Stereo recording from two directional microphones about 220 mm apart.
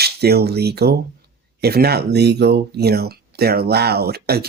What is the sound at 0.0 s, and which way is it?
Speech, 45° right (ahead or behind).